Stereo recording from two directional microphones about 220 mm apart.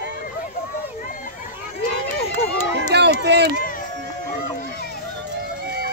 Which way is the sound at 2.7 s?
50° right (ahead or behind).